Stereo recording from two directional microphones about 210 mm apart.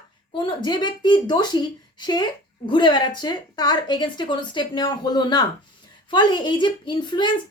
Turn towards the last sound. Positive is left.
turn(degrees=20)  # may be behind; listen again after turning